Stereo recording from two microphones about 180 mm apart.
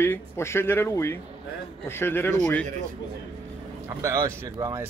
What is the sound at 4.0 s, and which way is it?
Speech, 15° right (ahead or behind).